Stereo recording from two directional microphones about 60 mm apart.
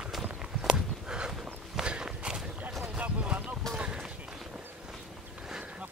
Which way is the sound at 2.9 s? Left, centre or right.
Right.